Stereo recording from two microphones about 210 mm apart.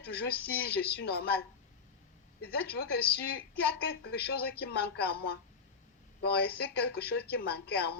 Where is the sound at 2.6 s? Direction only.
50° left (ahead or behind).